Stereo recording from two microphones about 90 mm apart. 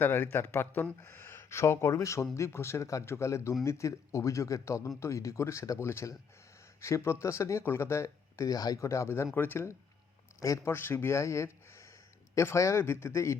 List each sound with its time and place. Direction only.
0.0 s speech: 25° left (ahead or behind)
10.4 s speech: 35° left (ahead or behind)
10.8 s speech: 25° left (ahead or behind)